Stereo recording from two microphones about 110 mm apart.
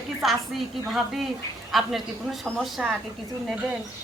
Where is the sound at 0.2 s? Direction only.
Centre (ahead or behind).